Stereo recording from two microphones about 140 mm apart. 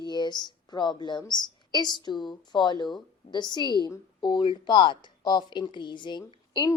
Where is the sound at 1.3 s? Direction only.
30° left (ahead or behind).